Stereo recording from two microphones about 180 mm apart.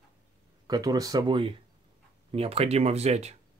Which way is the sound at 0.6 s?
20° right (ahead or behind).